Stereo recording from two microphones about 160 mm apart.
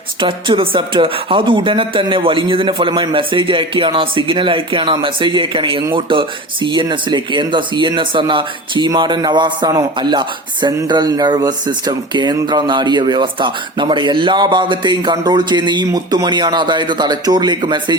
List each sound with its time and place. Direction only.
0.2 s speech: 30° right (ahead or behind)